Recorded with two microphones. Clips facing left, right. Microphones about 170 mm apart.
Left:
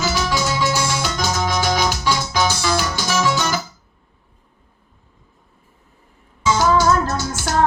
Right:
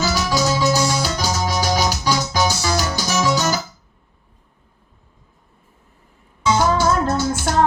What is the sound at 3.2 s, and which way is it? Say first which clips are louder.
Guitar: right 3 dB; 40° right (ahead or behind).